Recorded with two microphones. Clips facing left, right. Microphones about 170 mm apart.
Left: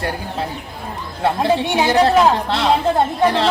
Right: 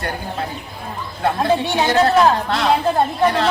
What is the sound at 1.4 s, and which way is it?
A woman's voice, 20° left (ahead or behind).